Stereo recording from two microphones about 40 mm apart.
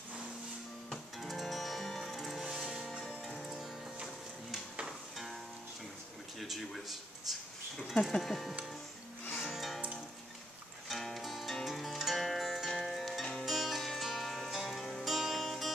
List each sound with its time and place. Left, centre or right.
1.2 s music: centre
3.1 s music: left
4.0 s music: centre
7.9 s speech: centre
8.2 s speech: centre
9.4 s music: centre
10.9 s music: centre
11.6 s zither: centre
12.6 s music: centre